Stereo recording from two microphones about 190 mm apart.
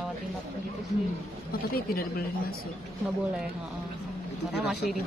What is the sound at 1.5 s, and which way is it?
Speech, 50° left (ahead or behind).